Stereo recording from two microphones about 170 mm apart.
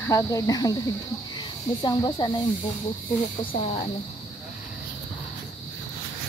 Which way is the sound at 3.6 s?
35° left (ahead or behind).